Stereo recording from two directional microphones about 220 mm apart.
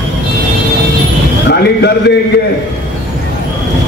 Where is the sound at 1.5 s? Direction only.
50° left (ahead or behind).